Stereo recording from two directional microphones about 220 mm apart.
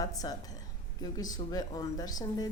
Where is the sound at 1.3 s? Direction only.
20° left (ahead or behind).